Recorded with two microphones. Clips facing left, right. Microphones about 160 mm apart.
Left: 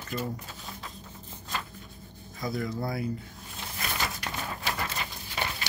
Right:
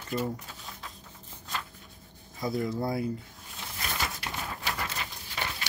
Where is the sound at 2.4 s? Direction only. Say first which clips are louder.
Right 2 dB; 25° right (ahead or behind).